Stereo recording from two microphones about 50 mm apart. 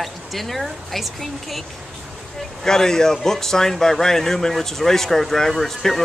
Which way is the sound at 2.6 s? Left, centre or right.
Centre.